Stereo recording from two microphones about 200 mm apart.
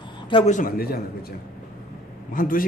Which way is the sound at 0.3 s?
30° left (ahead or behind).